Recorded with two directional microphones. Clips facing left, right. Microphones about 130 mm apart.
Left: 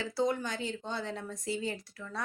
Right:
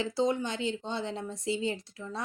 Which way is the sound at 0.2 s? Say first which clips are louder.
Right 1 dB; 25° right (ahead or behind).